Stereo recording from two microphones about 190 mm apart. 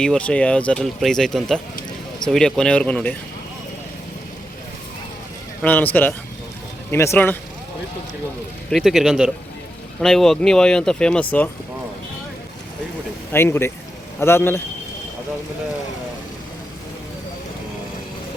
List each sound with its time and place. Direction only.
0.0 s speech: 5° left (ahead or behind)
5.6 s speech: 10° left (ahead or behind)
8.7 s speech: centre (ahead or behind)
13.3 s speech: 10° left (ahead or behind)